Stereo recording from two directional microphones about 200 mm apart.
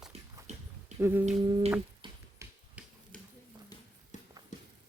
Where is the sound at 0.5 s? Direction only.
35° right (ahead or behind).